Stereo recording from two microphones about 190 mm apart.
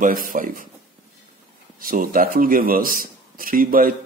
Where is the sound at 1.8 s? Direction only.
45° right (ahead or behind).